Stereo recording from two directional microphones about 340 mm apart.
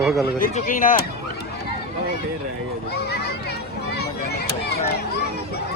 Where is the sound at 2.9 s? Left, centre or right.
Left.